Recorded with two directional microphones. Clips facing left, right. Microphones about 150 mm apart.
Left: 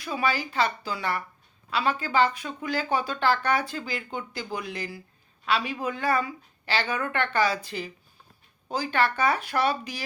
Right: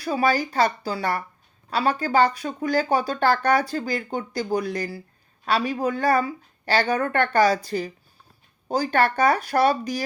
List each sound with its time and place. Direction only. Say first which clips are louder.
0.0 s speech: right 6 dB; 40° right (ahead or behind)